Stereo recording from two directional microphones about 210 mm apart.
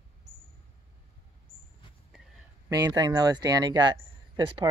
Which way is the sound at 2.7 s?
20° right (ahead or behind).